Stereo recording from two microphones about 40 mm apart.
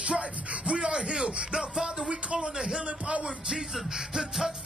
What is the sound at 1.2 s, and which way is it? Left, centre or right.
Speech, right.